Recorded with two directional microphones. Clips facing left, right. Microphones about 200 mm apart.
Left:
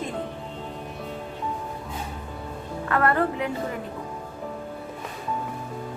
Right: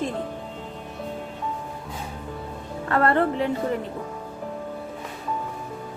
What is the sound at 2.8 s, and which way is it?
Speech, 30° right (ahead or behind).